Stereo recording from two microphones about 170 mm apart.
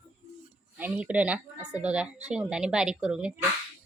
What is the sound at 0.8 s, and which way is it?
Speech, 10° right (ahead or behind).